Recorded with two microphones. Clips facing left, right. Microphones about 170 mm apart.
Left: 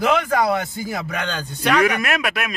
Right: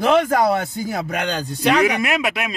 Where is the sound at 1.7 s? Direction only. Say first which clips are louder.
Even; 20° right (ahead or behind).